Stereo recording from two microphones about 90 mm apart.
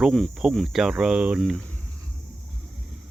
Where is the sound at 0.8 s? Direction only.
10° right (ahead or behind).